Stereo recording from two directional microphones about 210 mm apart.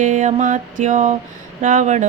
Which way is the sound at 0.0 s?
35° right (ahead or behind).